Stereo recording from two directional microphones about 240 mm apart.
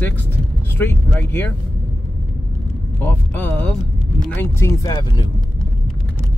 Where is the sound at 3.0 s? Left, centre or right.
Centre.